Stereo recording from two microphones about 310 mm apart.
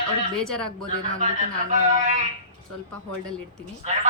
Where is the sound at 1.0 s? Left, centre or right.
Right.